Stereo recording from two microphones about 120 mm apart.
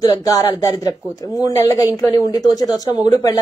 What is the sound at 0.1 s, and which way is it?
A woman's voice, 30° left (ahead or behind).